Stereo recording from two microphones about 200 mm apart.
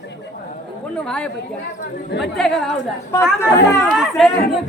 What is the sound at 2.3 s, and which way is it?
Speech, centre (ahead or behind).